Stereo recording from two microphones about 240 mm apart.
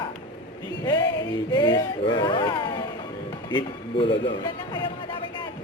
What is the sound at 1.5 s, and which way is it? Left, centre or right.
Speech, centre.